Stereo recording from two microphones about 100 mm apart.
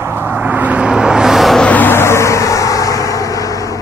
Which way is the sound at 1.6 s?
20° left (ahead or behind).